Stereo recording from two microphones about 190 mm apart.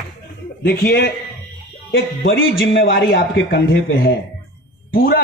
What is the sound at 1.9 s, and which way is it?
A man's voice, 85° left.